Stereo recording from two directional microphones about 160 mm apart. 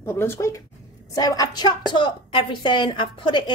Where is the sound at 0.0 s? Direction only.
15° left (ahead or behind).